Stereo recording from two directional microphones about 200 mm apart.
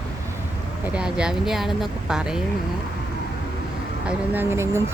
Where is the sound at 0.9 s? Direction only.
5° right (ahead or behind).